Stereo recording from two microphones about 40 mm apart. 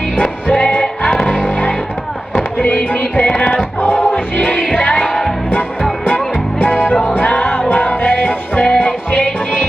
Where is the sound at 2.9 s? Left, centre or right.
Left.